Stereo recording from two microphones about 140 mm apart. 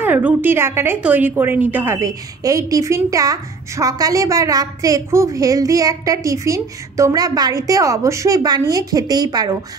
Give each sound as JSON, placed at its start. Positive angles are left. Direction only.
{"t": 0.0, "sound": "a woman's voice", "side_deg": -15}